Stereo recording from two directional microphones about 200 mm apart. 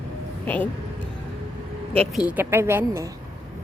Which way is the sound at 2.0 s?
Centre (ahead or behind).